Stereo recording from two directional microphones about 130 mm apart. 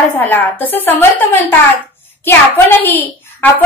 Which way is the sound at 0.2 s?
15° left (ahead or behind).